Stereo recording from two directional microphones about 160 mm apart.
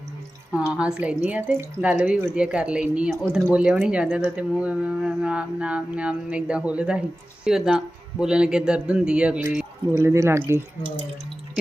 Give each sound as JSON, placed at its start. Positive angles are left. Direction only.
{"t": 0.7, "sound": "speech", "side_deg": -5}